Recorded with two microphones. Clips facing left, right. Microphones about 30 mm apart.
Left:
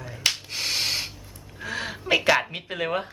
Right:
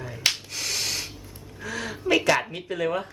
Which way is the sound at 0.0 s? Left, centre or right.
Centre.